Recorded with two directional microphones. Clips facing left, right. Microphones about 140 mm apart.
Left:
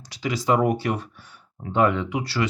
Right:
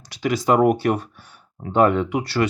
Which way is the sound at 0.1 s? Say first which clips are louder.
Right 3 dB; 55° right (ahead or behind).